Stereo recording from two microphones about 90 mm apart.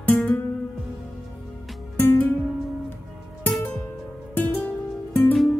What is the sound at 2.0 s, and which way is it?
Music, 20° left (ahead or behind).